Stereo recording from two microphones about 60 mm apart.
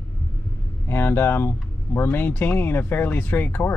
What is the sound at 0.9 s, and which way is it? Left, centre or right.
Speech, left.